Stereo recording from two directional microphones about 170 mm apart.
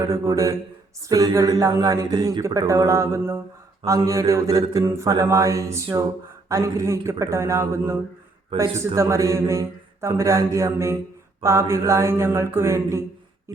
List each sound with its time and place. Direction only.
0.0 s speech: 20° right (ahead or behind)
6.5 s mantra: 20° right (ahead or behind)
9.0 s mantra: 20° right (ahead or behind)